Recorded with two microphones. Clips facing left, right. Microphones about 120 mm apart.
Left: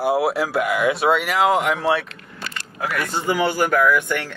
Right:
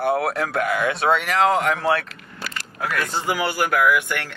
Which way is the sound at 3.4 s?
5° right (ahead or behind).